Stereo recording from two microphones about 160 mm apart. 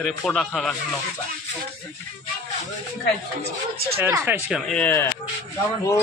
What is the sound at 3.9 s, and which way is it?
Speech, 15° right (ahead or behind).